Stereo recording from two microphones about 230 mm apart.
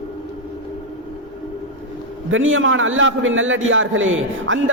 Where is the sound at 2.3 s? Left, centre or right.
Right.